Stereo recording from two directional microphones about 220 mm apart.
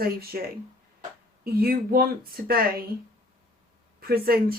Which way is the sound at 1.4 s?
45° right (ahead or behind).